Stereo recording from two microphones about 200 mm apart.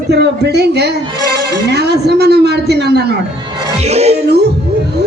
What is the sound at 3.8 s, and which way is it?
Music, 30° right (ahead or behind).